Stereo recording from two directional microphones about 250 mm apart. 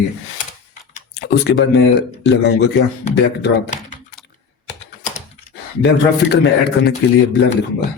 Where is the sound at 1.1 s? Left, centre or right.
Left.